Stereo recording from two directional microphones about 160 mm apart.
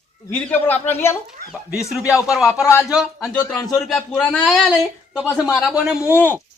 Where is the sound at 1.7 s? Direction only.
5° right (ahead or behind).